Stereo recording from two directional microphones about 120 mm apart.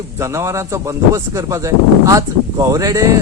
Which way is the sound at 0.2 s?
25° right (ahead or behind).